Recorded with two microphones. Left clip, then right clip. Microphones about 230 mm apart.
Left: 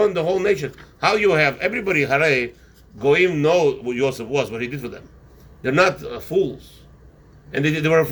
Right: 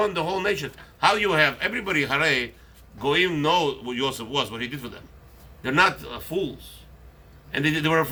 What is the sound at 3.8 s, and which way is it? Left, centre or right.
Speech, right.